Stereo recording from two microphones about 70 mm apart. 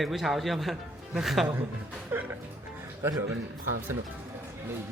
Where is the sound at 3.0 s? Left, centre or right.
Right.